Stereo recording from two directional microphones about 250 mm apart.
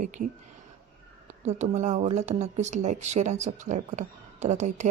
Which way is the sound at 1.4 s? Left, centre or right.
Right.